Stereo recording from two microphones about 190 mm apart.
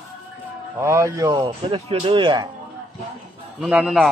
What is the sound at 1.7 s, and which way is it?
Speech, 30° right (ahead or behind).